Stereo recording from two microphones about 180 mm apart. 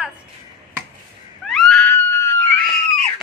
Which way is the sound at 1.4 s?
Centre (ahead or behind).